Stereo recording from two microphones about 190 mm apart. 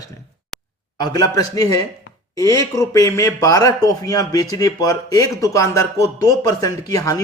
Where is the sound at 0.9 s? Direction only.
20° left (ahead or behind).